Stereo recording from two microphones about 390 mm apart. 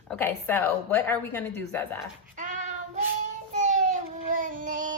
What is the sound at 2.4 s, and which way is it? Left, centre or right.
Child singing, centre.